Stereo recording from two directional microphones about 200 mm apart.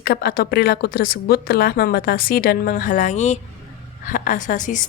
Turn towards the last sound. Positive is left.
turn(degrees=40)  # may be behind; listen again after turning